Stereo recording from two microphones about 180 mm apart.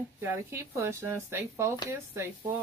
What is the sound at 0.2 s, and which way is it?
A woman's voice, 10° right (ahead or behind).